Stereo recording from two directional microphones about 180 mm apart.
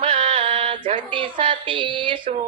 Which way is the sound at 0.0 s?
30° right (ahead or behind).